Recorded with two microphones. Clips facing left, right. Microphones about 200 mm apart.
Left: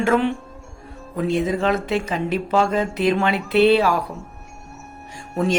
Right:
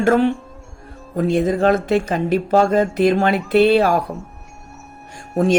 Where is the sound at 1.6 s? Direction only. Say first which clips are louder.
Right 5 dB; 50° right (ahead or behind).